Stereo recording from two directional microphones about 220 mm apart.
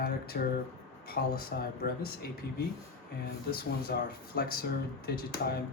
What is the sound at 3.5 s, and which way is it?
Speech, 45° left (ahead or behind).